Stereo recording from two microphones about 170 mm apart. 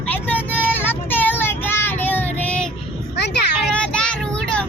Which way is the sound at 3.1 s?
90° left.